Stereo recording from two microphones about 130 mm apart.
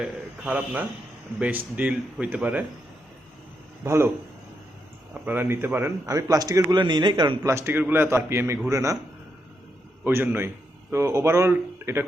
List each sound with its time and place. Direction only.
0.0 s a man's voice: 10° right (ahead or behind)
3.8 s a man's voice: 20° right (ahead or behind)
5.2 s speech: 15° right (ahead or behind)
6.1 s a man's voice: 25° right (ahead or behind)
7.4 s a man's voice: 20° right (ahead or behind)
10.0 s a man's voice: 15° right (ahead or behind)